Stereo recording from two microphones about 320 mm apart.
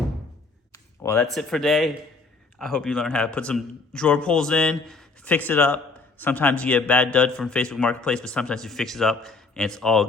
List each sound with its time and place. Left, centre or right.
0.7 s a man's voice: centre